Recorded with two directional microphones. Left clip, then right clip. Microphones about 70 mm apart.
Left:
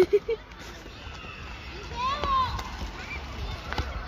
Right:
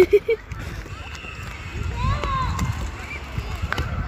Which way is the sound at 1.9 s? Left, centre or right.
Centre.